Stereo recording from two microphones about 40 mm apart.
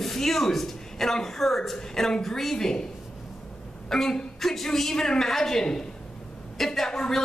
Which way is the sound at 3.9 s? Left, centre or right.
Centre.